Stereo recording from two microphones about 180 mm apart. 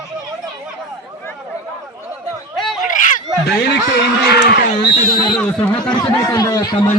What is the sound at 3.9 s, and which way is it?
Speech, 65° left (ahead or behind).